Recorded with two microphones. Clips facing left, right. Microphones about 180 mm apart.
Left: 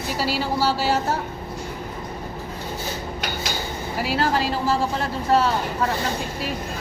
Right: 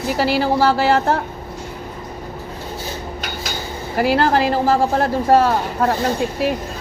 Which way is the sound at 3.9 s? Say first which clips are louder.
Right 7 dB; 55° right (ahead or behind).